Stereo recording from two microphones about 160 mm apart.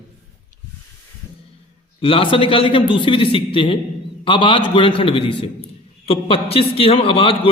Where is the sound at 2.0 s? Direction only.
35° left (ahead or behind).